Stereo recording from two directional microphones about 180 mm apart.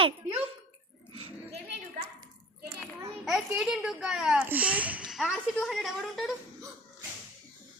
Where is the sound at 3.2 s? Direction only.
Centre (ahead or behind).